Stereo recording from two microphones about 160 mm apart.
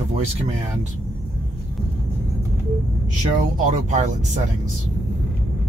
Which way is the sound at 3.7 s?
50° right (ahead or behind).